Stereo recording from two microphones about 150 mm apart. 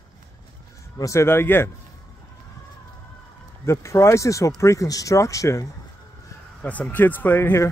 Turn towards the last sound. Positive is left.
turn(degrees=15)  # may be behind; listen again after turning